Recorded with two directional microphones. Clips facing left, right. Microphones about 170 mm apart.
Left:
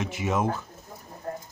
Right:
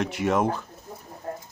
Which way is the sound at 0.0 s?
65° right (ahead or behind).